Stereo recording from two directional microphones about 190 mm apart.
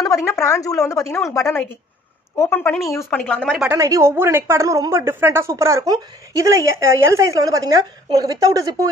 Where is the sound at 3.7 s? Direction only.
15° right (ahead or behind).